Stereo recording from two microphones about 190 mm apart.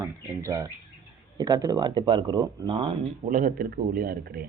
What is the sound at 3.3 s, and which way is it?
A man's voice, 45° right (ahead or behind).